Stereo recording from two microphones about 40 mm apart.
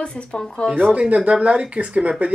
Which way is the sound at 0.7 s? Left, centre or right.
Right.